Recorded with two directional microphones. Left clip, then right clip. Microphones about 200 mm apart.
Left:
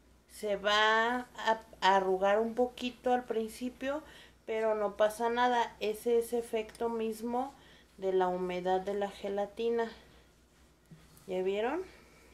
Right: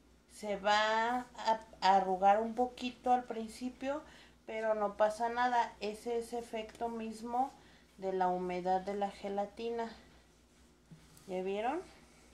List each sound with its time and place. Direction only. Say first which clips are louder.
0.4 s speech: left 3 dB; 20° left (ahead or behind)
11.2 s speech: left 4 dB; 35° left (ahead or behind)